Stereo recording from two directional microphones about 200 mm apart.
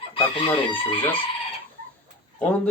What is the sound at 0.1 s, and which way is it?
Chicken, 25° left (ahead or behind).